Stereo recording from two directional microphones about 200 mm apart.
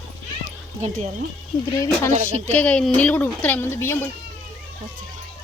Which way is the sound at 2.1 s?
35° right (ahead or behind).